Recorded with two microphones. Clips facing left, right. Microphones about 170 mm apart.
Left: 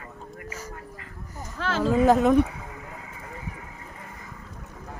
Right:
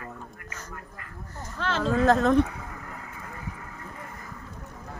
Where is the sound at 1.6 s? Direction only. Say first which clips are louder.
Left 3 dB; 5° left (ahead or behind).